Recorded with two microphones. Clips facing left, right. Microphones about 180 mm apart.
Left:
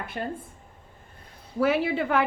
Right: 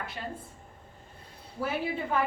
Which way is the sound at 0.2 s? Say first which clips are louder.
Left 9 dB; 55° left (ahead or behind).